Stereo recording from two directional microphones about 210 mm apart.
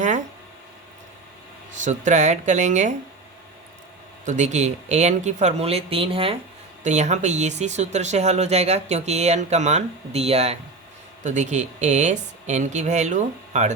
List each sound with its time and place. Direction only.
1.8 s speech: 35° right (ahead or behind)
4.3 s speech: 35° right (ahead or behind)